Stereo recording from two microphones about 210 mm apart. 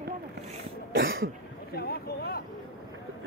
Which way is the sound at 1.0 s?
70° right (ahead or behind).